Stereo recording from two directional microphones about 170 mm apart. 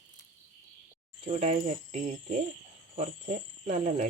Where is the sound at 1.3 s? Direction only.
45° right (ahead or behind).